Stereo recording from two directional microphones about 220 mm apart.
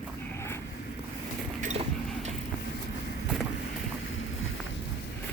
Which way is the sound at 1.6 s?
30° right (ahead or behind).